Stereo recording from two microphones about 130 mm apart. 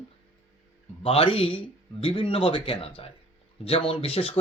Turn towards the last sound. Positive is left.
turn(degrees=50)  # may be behind; listen again after turning